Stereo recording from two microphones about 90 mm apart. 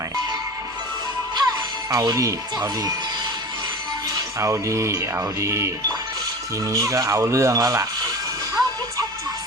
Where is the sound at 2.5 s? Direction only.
45° right (ahead or behind).